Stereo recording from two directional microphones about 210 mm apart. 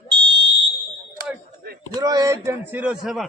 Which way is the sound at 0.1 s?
20° right (ahead or behind).